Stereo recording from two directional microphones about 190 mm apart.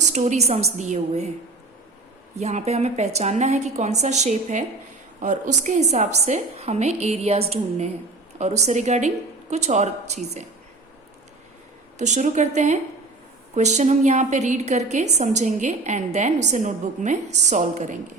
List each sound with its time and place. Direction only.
0.1 s a woman's voice: 40° right (ahead or behind)
2.3 s a woman's voice: 35° right (ahead or behind)
11.9 s a woman's voice: 40° right (ahead or behind)